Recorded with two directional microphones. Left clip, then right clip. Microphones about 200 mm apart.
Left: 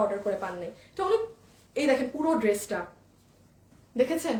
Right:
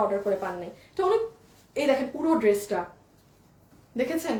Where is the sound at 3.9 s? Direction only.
15° left (ahead or behind).